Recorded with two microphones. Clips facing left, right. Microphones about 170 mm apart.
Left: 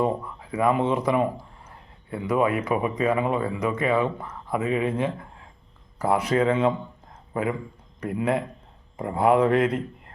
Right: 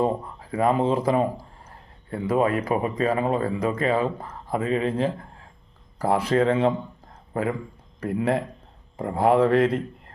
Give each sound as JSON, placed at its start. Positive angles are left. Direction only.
{"t": 0.0, "sound": "speech", "side_deg": -35}
{"t": 8.0, "sound": "speech", "side_deg": -35}